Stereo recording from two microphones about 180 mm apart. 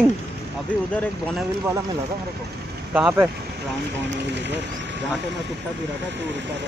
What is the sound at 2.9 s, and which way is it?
Speech, 10° right (ahead or behind).